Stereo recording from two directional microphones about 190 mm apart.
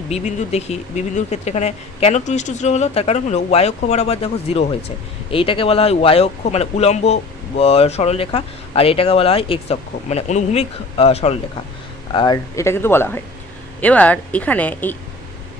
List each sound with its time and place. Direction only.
0.1 s speech: 35° left (ahead or behind); by 15.0 s 10° left (ahead or behind)